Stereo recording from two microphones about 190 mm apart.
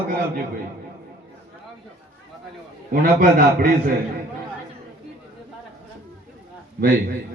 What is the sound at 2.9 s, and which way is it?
A man's voice, 50° right (ahead or behind).